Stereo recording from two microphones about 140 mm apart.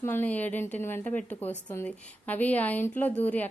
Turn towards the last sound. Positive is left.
turn(degrees=10)  # may be behind; listen again after turning